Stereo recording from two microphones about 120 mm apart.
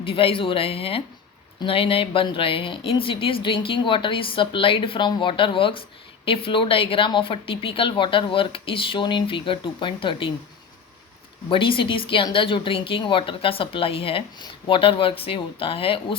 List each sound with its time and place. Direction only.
0.0 s a woman's voice: 50° left (ahead or behind)
11.4 s a woman's voice: 45° left (ahead or behind)